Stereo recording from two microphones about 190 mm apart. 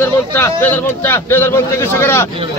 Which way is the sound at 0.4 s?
10° left (ahead or behind).